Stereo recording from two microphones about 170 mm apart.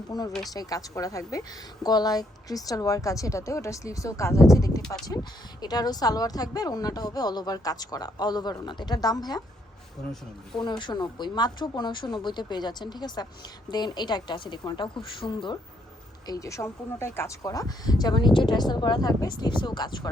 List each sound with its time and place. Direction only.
0.1 s a woman's voice: 20° left (ahead or behind)
10.6 s a woman's voice: 25° left (ahead or behind)